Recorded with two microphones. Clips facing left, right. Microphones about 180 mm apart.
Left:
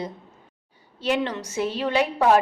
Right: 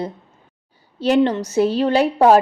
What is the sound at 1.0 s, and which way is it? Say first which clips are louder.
A woman's voice: right 9 dB; 35° right (ahead or behind).